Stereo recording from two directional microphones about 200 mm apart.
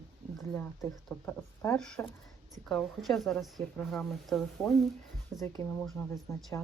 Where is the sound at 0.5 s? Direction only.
5° left (ahead or behind).